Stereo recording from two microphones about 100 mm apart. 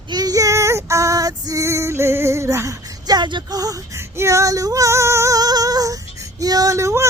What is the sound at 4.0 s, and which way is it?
Female singing, 25° right (ahead or behind).